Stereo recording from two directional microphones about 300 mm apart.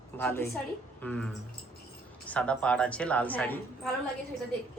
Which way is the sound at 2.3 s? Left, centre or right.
Centre.